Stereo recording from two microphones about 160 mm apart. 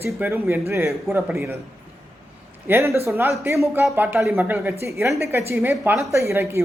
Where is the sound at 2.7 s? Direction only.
15° right (ahead or behind).